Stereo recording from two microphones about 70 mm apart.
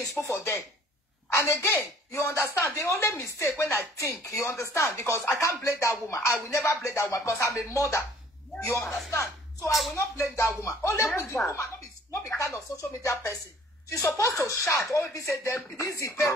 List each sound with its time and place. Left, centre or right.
0.2 s speech: left
8.8 s speech: centre
9.9 s speech: left
12.1 s speech: left